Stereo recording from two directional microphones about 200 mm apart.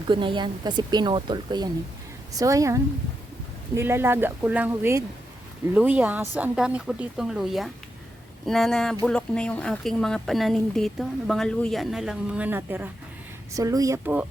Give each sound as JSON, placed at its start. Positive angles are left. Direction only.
{"t": 0.1, "sound": "speech", "side_deg": -25}